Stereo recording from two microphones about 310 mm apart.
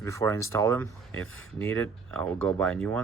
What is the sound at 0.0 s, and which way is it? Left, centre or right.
Speech, centre.